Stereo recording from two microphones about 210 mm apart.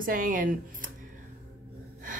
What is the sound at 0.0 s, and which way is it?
Speech, 40° right (ahead or behind).